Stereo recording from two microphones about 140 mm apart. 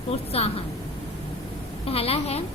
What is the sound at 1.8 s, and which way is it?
Speech, 45° left (ahead or behind).